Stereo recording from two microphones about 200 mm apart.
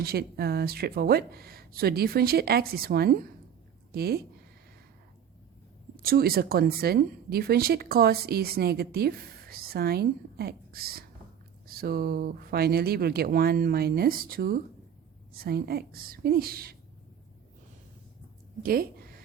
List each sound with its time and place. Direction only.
0.0 s a woman's voice: 50° right (ahead or behind)
6.0 s a woman's voice: 50° right (ahead or behind)
18.6 s a woman's voice: 45° right (ahead or behind)